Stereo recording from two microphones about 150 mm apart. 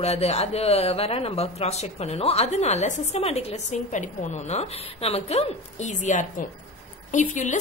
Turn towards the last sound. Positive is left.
turn(degrees=55)  # may be behind; listen again after turning